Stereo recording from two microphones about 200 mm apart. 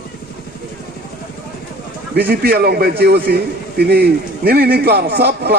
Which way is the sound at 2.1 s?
50° right (ahead or behind).